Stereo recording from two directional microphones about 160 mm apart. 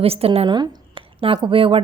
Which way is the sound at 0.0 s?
40° right (ahead or behind).